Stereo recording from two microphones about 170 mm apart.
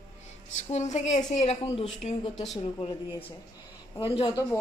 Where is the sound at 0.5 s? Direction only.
45° left (ahead or behind).